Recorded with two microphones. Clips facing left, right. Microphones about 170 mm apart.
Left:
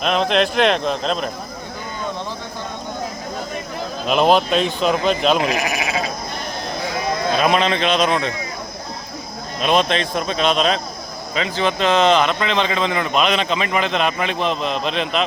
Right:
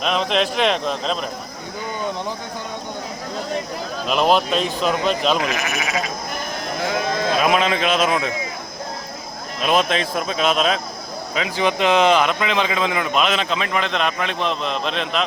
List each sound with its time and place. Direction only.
0.0 s speech: centre (ahead or behind)
4.0 s speech: centre (ahead or behind)
5.4 s speech: 35° left (ahead or behind)
7.3 s speech: 5° right (ahead or behind)
9.6 s speech: 5° right (ahead or behind)